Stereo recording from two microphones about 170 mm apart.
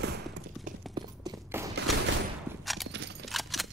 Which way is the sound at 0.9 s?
25° right (ahead or behind).